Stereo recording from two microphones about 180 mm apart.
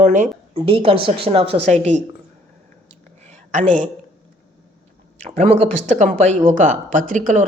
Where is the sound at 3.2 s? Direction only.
40° right (ahead or behind).